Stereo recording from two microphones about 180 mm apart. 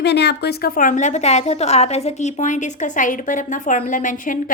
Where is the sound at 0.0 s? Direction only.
70° left (ahead or behind).